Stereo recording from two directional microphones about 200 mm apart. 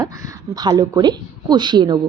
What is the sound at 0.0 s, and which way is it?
A woman's voice, 20° right (ahead or behind).